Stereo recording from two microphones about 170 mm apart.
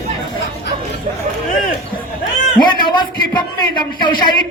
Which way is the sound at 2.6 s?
25° left (ahead or behind).